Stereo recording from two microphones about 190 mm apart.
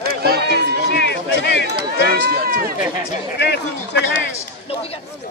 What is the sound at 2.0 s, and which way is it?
Speech, 55° right (ahead or behind).